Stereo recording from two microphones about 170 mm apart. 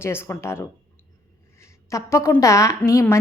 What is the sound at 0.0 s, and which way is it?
A woman's voice, 15° left (ahead or behind).